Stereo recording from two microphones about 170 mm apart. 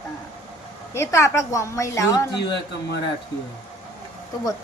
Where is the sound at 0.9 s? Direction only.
15° left (ahead or behind).